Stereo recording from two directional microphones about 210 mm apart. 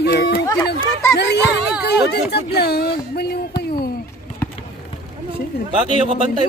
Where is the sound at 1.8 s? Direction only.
50° left (ahead or behind).